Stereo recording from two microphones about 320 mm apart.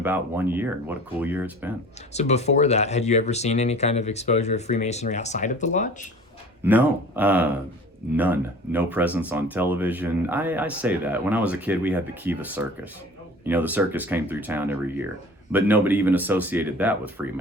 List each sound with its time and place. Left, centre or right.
0.0 s speech: centre
2.1 s speech: left
6.7 s speech: centre